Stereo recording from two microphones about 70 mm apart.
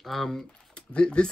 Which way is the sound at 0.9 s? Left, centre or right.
Centre.